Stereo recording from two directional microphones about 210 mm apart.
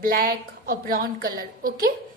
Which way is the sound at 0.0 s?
45° right (ahead or behind).